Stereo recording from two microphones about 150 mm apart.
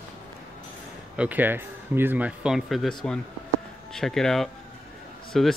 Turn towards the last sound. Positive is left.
turn(degrees=0)  # may be behind; listen again after turning